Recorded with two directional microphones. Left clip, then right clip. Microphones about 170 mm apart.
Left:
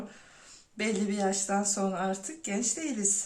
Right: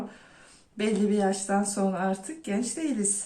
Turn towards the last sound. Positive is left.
turn(degrees=20)  # may be behind; listen again after turning